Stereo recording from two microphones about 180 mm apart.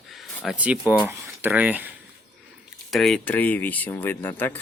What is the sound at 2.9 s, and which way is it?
Speech, centre (ahead or behind).